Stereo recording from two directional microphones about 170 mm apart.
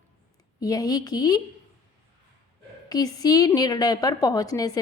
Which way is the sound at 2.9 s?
20° left (ahead or behind).